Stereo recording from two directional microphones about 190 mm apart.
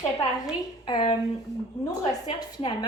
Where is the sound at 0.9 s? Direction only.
25° left (ahead or behind).